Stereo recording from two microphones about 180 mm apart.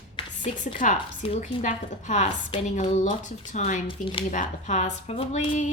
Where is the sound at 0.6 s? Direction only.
45° left (ahead or behind).